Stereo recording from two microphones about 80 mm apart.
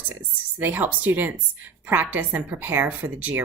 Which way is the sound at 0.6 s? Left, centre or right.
Right.